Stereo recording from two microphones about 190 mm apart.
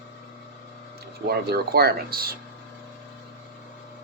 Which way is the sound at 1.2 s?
55° right (ahead or behind).